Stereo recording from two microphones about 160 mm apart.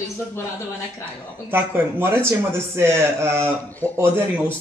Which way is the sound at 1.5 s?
15° right (ahead or behind).